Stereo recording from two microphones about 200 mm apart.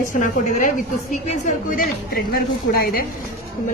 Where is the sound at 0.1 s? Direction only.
40° left (ahead or behind).